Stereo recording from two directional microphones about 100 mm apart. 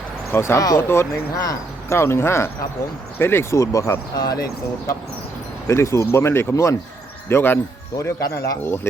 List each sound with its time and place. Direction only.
0.3 s speech: 25° left (ahead or behind)
4.2 s speech: 40° left (ahead or behind)
5.6 s speech: 30° left (ahead or behind)